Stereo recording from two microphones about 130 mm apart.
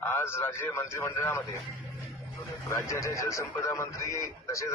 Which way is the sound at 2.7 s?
25° left (ahead or behind).